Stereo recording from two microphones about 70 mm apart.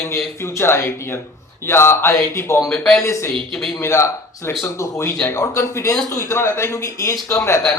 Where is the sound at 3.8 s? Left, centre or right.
Left.